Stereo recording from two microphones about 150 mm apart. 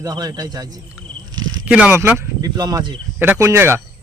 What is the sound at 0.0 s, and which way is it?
Speech, 25° right (ahead or behind).